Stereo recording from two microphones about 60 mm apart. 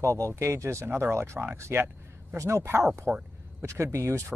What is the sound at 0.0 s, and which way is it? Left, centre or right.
Speech, right.